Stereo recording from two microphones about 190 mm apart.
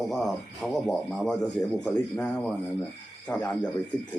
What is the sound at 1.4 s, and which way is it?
Speech, 20° left (ahead or behind).